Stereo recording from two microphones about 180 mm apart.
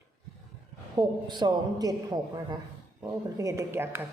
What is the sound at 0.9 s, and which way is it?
A man's voice, 25° right (ahead or behind).